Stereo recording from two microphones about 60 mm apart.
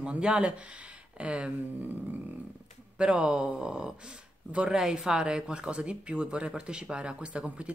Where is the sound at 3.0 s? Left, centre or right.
Centre.